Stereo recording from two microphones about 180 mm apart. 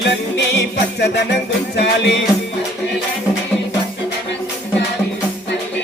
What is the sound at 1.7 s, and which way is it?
Music, 70° left (ahead or behind).